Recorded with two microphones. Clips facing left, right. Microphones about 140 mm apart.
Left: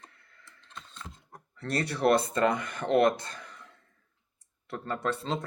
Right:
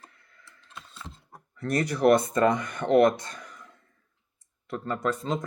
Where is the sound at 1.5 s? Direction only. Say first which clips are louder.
Right 4 dB; 30° left (ahead or behind).